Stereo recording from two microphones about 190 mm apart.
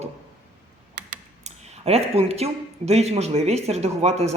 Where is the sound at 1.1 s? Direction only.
35° right (ahead or behind).